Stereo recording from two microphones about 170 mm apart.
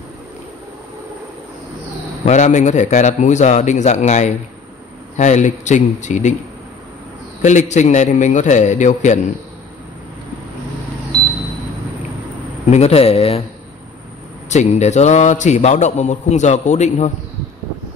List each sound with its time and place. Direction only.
2.2 s speech: 45° left (ahead or behind)
7.4 s speech: 45° left (ahead or behind)
12.7 s speech: 40° left (ahead or behind)
14.5 s speech: 40° left (ahead or behind)